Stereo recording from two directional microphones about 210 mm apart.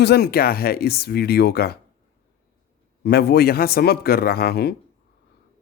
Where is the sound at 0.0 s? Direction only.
50° left (ahead or behind).